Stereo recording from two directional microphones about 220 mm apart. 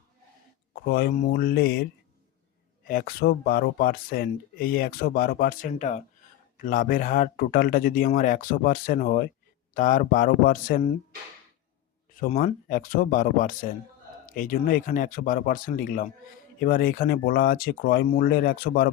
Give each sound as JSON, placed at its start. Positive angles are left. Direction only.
{"t": 0.9, "sound": "speech", "side_deg": 45}
{"t": 12.3, "sound": "speech", "side_deg": 30}